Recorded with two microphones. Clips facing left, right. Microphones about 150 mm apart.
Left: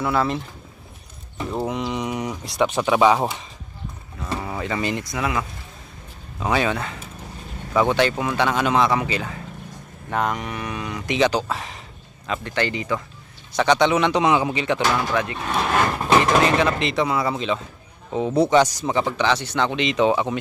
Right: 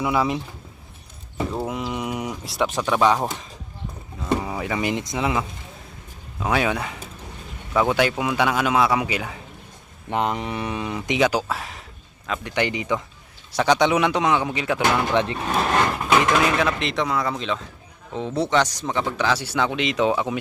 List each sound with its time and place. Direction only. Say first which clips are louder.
0.0 s a man's voice: even; 10° right (ahead or behind)
1.5 s speech: left 5 dB; 5° right (ahead or behind)
4.3 s speech: right 3 dB; 10° right (ahead or behind)
6.4 s a man's voice: even; 5° right (ahead or behind)
10.1 s speech: even; 25° right (ahead or behind)
11.2 s speech: left 1 dB; 10° right (ahead or behind)
12.4 s a man's voice: right 1 dB; 15° right (ahead or behind)
14.9 s speech: right 2 dB; 25° right (ahead or behind)
15.4 s vehicle: even; centre (ahead or behind)
16.4 s speech: left 2 dB; centre (ahead or behind)